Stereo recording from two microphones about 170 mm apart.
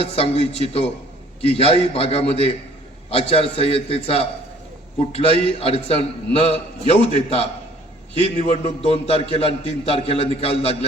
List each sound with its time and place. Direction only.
0.0 s a man's voice: 35° left (ahead or behind)
8.2 s a man's voice: 40° left (ahead or behind)